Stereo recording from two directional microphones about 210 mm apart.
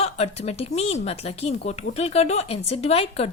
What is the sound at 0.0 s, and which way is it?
Speech, 30° left (ahead or behind).